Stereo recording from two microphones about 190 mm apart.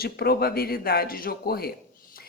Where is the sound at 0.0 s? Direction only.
55° left (ahead or behind).